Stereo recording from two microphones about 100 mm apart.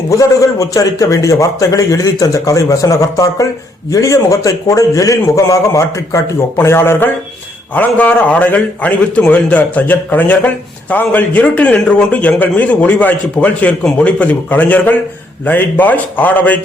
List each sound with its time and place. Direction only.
0.1 s a man's voice: 35° left (ahead or behind); by 16.6 s 15° left (ahead or behind)